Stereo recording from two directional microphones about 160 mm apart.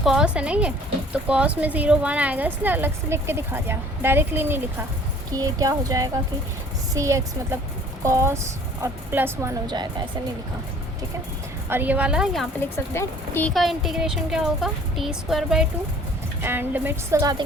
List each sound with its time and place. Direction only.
0.0 s a woman's voice: 5° right (ahead or behind); by 9.8 s 20° right (ahead or behind)
11.7 s a woman's voice: 10° right (ahead or behind)
12.5 s speech: 15° left (ahead or behind)
13.5 s a woman's voice: centre (ahead or behind); by 17.4 s 20° right (ahead or behind)